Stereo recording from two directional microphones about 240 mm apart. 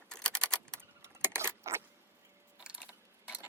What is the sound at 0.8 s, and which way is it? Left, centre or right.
Keys jangling, centre.